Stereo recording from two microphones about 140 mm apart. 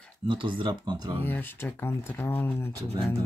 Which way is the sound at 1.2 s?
15° left (ahead or behind).